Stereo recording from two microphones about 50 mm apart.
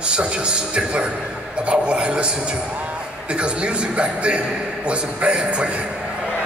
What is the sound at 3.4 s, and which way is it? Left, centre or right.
A man's voice, right.